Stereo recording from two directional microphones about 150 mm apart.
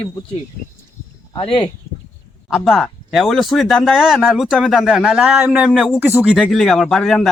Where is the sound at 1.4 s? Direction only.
35° left (ahead or behind).